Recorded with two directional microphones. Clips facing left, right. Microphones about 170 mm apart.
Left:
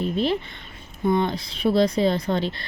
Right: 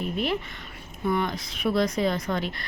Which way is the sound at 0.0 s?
30° left (ahead or behind).